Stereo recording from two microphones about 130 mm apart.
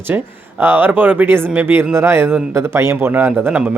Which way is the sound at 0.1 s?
15° right (ahead or behind).